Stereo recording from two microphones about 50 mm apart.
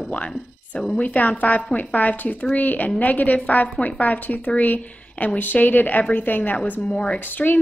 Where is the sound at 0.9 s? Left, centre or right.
Left.